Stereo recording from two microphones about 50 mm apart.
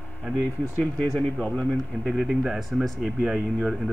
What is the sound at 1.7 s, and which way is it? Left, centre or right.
Speech, centre.